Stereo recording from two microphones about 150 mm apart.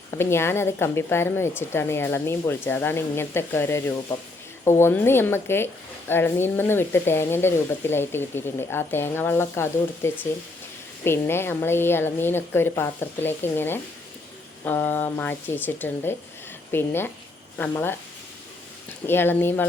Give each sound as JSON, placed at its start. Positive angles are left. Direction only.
{"t": 0.2, "sound": "speech", "side_deg": 15}
{"t": 19.0, "sound": "speech", "side_deg": 15}